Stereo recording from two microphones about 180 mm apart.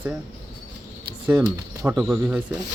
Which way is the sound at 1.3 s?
Centre (ahead or behind).